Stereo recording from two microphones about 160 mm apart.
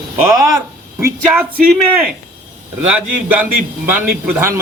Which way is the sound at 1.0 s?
15° right (ahead or behind).